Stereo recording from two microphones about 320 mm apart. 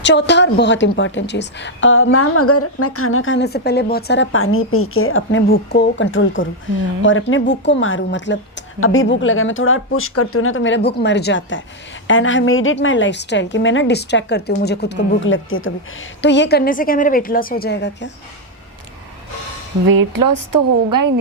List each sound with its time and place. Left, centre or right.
0.0 s a woman's voice: left
19.9 s a woman's voice: right